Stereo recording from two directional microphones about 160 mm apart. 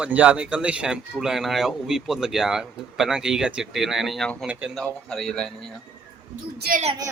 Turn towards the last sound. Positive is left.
turn(degrees=-80)